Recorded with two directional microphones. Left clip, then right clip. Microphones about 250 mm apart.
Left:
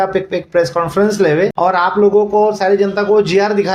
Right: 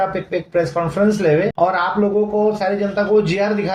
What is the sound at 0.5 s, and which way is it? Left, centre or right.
Speech, left.